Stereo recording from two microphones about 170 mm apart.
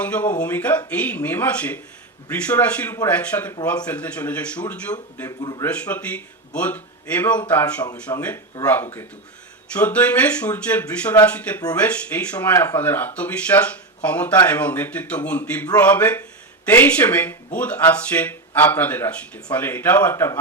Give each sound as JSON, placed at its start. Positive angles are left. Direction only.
{"t": 0.0, "sound": "speech", "side_deg": 10}
{"t": 5.4, "sound": "speech", "side_deg": 25}
{"t": 5.6, "sound": "speech", "side_deg": 10}